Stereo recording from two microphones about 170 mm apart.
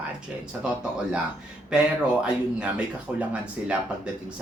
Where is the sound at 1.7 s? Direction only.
5° right (ahead or behind).